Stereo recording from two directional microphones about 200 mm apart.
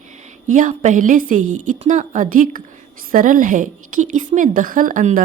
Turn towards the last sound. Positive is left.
turn(degrees=-45)  # may be behind; listen again after turning